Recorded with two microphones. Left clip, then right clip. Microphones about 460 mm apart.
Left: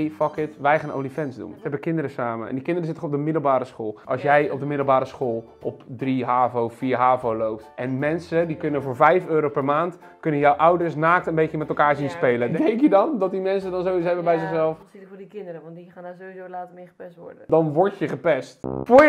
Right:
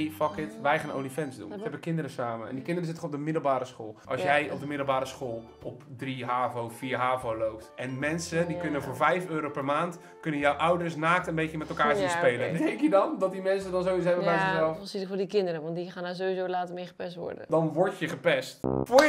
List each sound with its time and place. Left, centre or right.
0.0 s speech: left
4.1 s speech: left
15.1 s speech: right
17.5 s speech: left
18.6 s speech: centre